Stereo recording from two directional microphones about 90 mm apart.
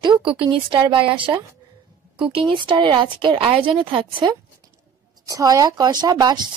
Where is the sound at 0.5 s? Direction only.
65° right (ahead or behind).